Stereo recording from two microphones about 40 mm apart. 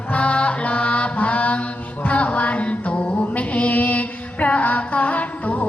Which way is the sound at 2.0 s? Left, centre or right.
Left.